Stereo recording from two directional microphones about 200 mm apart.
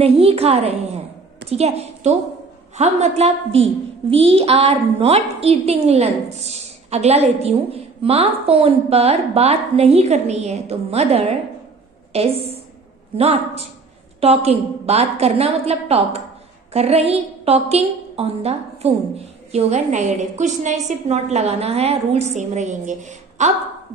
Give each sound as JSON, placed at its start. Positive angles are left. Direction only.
{"t": 0.0, "sound": "a woman's voice", "side_deg": -30}